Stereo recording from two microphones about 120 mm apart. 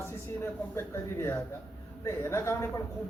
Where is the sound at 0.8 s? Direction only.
20° left (ahead or behind).